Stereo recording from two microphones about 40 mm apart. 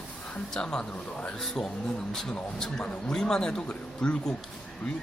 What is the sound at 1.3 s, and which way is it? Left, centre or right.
A man's voice, centre.